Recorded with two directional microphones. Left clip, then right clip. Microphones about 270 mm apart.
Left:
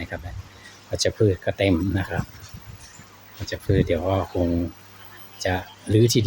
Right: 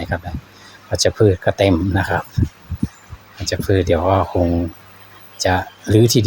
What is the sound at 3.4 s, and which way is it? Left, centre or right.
Speech, centre.